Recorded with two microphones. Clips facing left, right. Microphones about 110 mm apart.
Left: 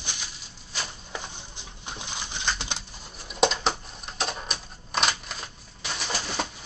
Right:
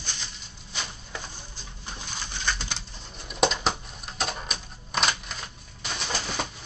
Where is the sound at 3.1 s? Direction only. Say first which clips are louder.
Left 1 dB; centre (ahead or behind).